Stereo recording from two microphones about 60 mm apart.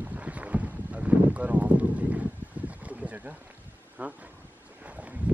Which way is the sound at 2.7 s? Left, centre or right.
Right.